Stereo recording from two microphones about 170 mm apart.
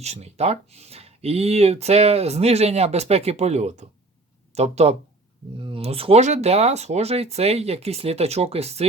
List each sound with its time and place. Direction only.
0.0 s speech: 40° right (ahead or behind)